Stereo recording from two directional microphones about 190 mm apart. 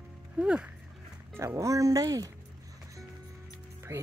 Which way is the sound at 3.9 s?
15° right (ahead or behind).